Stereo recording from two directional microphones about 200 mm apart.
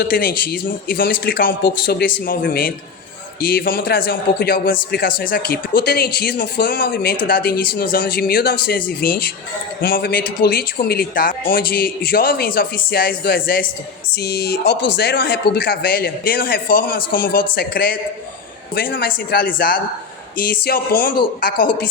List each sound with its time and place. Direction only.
0.0 s a man's voice: 45° left (ahead or behind)